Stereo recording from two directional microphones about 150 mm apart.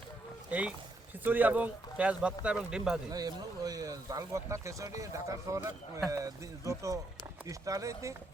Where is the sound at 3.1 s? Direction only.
25° right (ahead or behind).